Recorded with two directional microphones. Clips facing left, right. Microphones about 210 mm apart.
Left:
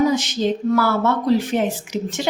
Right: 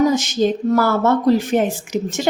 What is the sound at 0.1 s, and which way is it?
Speech, 45° right (ahead or behind).